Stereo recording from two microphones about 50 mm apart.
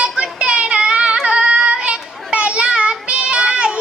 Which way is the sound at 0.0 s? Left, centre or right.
Right.